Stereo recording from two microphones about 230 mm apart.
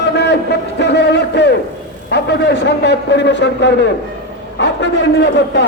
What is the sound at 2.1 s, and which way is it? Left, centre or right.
A man's voice, left.